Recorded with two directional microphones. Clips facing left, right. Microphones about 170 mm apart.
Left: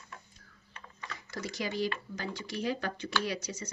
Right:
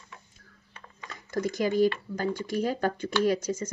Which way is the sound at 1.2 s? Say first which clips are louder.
Right 10 dB; 50° right (ahead or behind).